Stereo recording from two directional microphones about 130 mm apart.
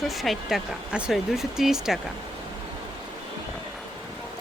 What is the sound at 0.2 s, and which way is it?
Speech, centre (ahead or behind).